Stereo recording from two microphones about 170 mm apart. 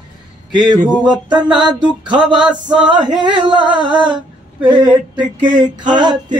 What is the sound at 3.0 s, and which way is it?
Male singing, 25° right (ahead or behind).